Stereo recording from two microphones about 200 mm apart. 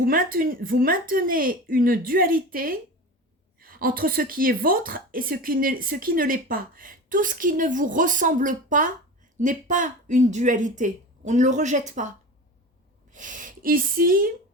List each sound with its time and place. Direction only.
0.0 s speech: 45° right (ahead or behind)